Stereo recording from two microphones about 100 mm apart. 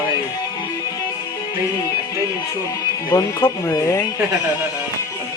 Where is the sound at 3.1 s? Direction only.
30° left (ahead or behind).